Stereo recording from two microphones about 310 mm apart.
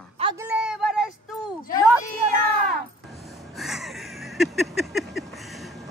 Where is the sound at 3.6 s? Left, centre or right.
Centre.